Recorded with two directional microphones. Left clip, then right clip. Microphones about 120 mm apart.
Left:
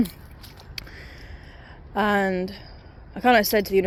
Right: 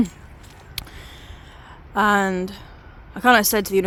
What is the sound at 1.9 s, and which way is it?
A woman's voice, 25° right (ahead or behind).